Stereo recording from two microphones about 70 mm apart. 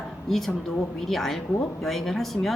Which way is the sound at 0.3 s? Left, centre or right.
Centre.